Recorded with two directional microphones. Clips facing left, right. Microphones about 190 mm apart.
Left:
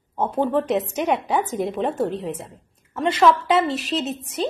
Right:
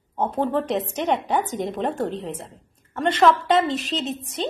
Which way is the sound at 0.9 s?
10° left (ahead or behind).